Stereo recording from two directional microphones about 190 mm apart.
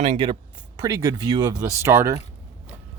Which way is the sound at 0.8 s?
20° right (ahead or behind).